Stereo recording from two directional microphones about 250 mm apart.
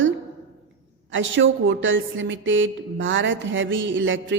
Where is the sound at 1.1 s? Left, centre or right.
Right.